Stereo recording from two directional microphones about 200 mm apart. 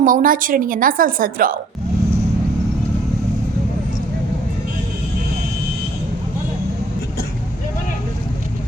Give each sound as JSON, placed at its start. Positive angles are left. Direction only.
{"t": 0.0, "sound": "a woman's voice", "side_deg": -45}